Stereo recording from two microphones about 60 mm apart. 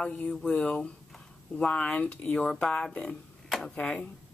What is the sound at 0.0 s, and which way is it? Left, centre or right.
Speech, centre.